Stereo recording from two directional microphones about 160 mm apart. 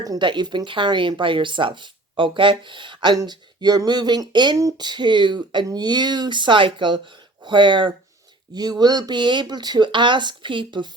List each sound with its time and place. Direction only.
0.0 s speech: 25° right (ahead or behind)